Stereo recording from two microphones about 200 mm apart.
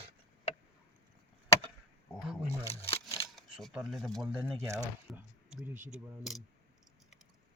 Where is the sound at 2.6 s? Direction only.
30° left (ahead or behind).